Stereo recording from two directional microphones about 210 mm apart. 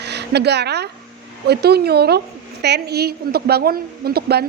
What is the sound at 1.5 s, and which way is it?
A woman's voice, 50° right (ahead or behind).